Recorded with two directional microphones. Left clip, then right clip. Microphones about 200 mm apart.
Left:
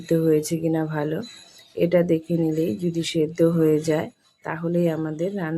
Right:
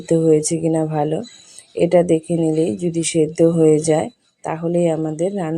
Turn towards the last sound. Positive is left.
turn(degrees=-15)  # may be behind; listen again after turning